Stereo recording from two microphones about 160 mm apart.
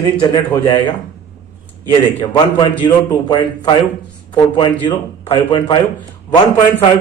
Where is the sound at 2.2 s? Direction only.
30° left (ahead or behind).